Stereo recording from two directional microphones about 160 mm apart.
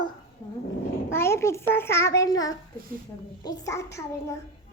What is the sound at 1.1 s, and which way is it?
A child's voice, 15° left (ahead or behind).